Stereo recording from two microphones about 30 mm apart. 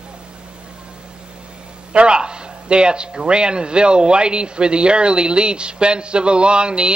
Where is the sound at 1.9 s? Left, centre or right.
Right.